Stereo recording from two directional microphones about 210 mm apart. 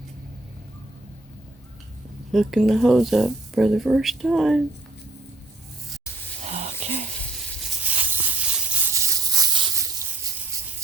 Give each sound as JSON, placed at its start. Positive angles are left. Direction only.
{"t": 2.3, "sound": "speech", "side_deg": 0}
{"t": 6.4, "sound": "whispering", "side_deg": -30}
{"t": 7.9, "sound": "a sound", "side_deg": -10}